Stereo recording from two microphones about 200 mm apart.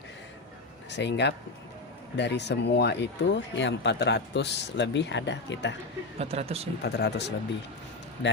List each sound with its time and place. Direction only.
0.9 s speech: 60° left (ahead or behind)
6.1 s speech: 30° right (ahead or behind)
6.8 s speech: 55° left (ahead or behind)